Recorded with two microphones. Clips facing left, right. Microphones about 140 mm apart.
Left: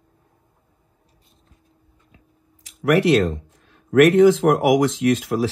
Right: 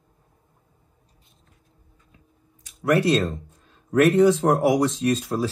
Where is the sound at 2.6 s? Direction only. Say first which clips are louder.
Left 3 dB; 90° left.